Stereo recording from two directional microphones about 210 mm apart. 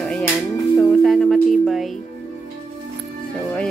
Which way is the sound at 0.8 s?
5° left (ahead or behind).